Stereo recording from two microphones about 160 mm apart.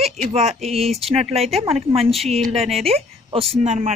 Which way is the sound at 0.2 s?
45° right (ahead or behind).